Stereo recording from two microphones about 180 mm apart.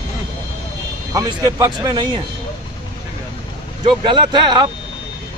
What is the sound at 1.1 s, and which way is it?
Speech, 20° right (ahead or behind).